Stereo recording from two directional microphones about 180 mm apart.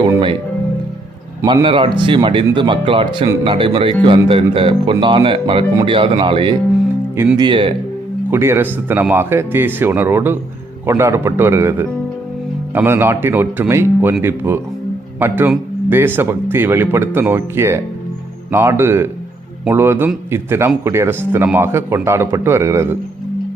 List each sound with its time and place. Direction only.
1.6 s speech: 30° right (ahead or behind)
8.3 s speech: 15° right (ahead or behind)